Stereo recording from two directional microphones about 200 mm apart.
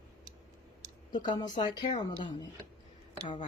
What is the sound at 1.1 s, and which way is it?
Speech, 20° left (ahead or behind).